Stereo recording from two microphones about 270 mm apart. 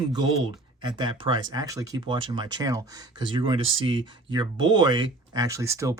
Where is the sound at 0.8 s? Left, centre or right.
Centre.